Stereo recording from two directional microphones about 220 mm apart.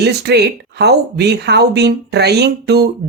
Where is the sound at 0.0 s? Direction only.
50° right (ahead or behind).